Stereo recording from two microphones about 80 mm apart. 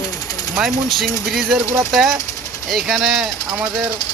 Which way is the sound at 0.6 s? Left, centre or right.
Centre.